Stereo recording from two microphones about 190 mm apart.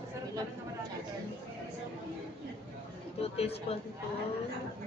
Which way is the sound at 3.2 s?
30° left (ahead or behind).